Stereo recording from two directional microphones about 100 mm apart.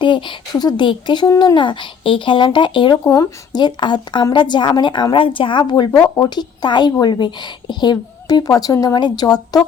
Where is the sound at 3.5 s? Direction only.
50° left (ahead or behind).